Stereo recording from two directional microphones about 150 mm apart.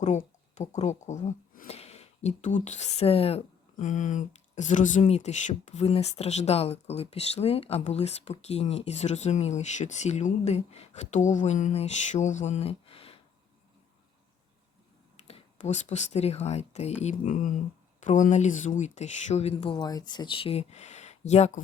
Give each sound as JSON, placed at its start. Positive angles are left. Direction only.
{"t": 0.0, "sound": "speech", "side_deg": 50}
{"t": 15.3, "sound": "speech", "side_deg": 50}